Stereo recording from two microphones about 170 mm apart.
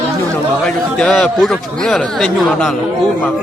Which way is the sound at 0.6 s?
5° left (ahead or behind).